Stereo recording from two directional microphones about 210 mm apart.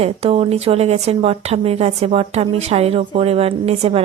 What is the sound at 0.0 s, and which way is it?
Speech, 30° right (ahead or behind).